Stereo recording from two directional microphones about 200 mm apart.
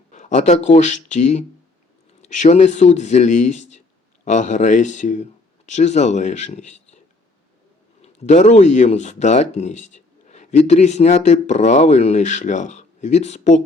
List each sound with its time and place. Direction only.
0.1 s speech: 35° left (ahead or behind)
8.0 s speech: 35° left (ahead or behind)